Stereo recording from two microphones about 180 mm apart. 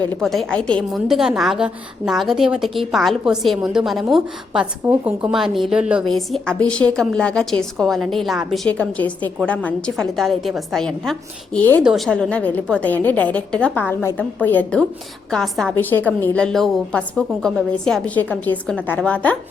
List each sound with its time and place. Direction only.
0.0 s a woman's voice: 5° left (ahead or behind)